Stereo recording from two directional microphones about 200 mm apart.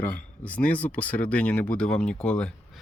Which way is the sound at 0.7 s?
5° left (ahead or behind).